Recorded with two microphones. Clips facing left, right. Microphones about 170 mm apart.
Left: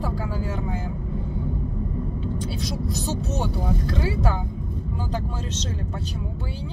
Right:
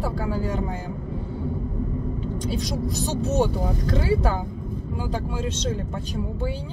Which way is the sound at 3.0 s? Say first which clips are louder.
Right 8 dB; 15° right (ahead or behind).